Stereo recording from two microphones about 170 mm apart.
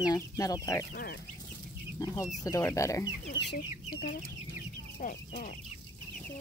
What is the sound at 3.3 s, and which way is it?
Chicken, 90° left.